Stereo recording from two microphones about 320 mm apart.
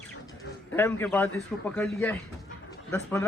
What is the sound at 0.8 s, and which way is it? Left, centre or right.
A man's voice, centre.